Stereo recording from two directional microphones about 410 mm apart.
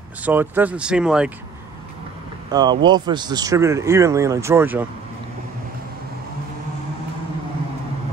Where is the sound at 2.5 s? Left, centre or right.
Centre.